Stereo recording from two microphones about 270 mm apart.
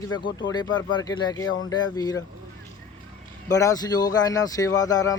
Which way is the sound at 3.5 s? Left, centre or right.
Centre.